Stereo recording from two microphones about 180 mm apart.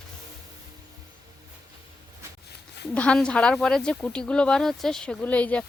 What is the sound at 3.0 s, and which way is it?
Speech, 5° left (ahead or behind).